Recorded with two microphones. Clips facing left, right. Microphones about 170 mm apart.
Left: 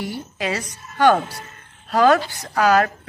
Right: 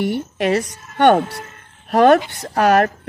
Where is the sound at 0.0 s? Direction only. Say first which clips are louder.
Right 7 dB; 60° right (ahead or behind).